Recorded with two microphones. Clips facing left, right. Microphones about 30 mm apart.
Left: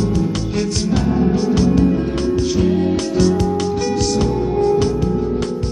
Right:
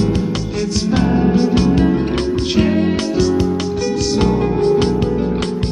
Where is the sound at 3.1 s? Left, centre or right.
Centre.